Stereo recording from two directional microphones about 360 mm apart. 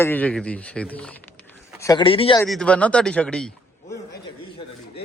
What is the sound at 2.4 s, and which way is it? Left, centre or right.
Speech, centre.